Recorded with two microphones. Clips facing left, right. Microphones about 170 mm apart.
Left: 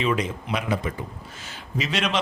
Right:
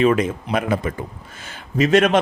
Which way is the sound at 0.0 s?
50° right (ahead or behind).